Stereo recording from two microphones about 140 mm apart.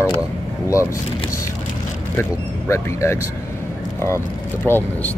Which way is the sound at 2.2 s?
20° left (ahead or behind).